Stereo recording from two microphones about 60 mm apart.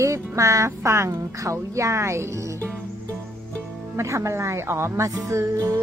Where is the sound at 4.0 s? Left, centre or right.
Right.